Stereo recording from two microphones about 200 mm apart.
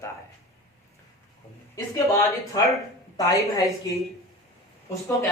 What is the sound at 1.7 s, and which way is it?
A woman's voice, 15° left (ahead or behind).